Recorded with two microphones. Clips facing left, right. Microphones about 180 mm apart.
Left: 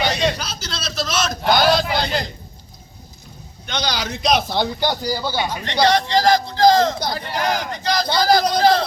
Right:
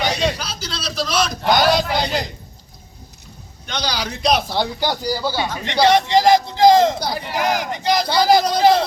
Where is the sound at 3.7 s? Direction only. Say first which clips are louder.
Even; 5° right (ahead or behind).